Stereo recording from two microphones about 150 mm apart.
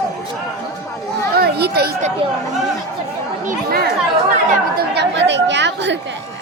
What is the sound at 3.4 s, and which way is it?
Speech, 90° right.